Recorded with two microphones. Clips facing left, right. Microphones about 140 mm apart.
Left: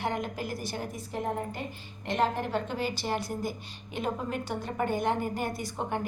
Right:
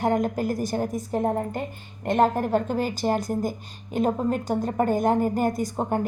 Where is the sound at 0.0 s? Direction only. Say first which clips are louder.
Right 9 dB; 45° right (ahead or behind).